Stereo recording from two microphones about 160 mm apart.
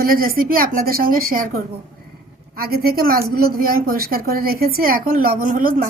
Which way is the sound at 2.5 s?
70° right (ahead or behind).